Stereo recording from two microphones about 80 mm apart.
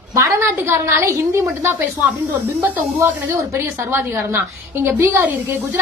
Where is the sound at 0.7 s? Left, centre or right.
Right.